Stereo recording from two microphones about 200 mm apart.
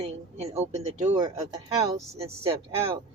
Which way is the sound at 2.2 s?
30° right (ahead or behind).